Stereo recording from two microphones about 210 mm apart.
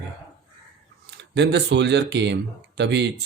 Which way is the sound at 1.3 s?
55° right (ahead or behind).